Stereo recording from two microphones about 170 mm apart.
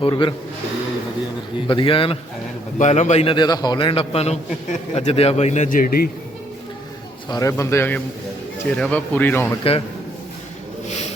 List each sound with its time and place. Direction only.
0.0 s a man's voice: 30° left (ahead or behind)
1.6 s a man's voice: 30° left (ahead or behind)
2.7 s a man's voice: 45° left (ahead or behind)
7.3 s speech: 20° left (ahead or behind)